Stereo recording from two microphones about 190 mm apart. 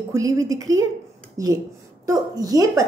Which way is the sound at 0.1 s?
20° right (ahead or behind).